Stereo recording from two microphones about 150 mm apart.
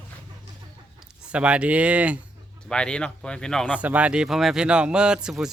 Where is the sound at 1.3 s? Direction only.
10° right (ahead or behind).